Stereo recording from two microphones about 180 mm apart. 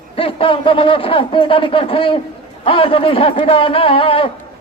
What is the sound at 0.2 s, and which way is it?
Speech, 30° left (ahead or behind).